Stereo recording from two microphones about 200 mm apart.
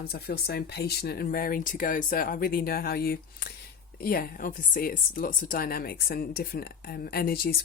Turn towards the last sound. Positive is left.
turn(degrees=50)  # may be behind; listen again after turning